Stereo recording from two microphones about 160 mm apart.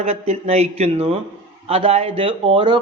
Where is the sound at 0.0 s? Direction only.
40° right (ahead or behind).